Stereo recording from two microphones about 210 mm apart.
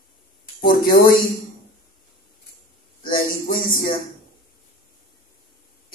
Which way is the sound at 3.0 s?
45° left (ahead or behind).